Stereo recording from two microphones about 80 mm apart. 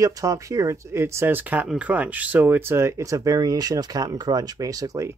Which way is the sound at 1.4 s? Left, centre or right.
Right.